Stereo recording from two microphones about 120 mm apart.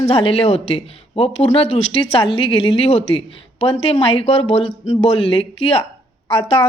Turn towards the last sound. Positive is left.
turn(degrees=50)  # may be behind; listen again after turning